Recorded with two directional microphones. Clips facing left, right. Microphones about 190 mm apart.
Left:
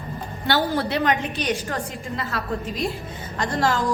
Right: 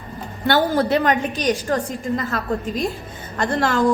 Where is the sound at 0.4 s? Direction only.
45° right (ahead or behind).